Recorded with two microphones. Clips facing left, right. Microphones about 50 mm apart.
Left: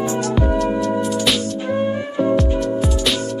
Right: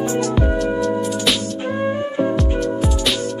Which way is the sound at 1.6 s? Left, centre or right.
Right.